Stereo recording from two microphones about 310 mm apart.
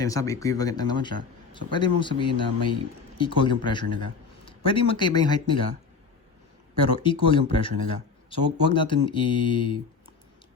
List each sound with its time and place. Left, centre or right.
0.0 s speech: centre
6.7 s speech: centre